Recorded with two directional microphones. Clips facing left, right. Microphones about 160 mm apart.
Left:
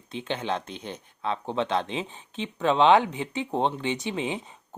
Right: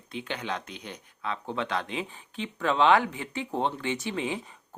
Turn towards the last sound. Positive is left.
turn(degrees=20)  # may be behind; listen again after turning